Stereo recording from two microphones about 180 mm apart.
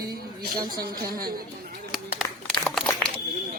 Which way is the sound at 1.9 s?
Centre (ahead or behind).